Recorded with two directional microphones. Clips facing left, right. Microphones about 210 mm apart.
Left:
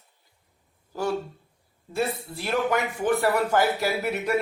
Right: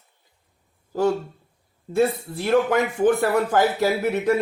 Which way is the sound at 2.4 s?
50° right (ahead or behind).